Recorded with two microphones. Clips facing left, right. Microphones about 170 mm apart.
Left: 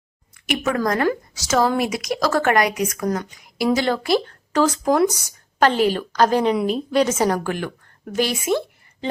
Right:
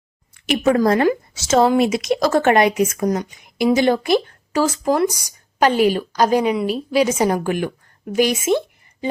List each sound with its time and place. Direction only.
0.4 s a woman's voice: 30° right (ahead or behind)